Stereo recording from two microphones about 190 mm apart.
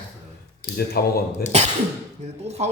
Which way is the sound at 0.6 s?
55° left (ahead or behind).